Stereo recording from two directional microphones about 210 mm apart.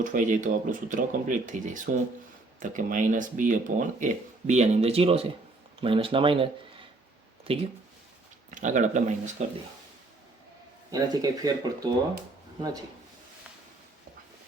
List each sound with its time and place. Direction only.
0.0 s speech: 35° right (ahead or behind)
10.9 s speech: 15° right (ahead or behind)